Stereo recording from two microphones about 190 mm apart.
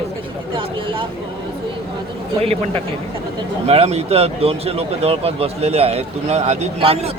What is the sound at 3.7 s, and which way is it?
A man's voice, 35° right (ahead or behind).